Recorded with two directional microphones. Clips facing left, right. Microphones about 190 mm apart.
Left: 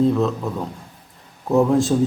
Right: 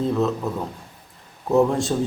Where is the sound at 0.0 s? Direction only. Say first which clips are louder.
Left 3 dB; centre (ahead or behind).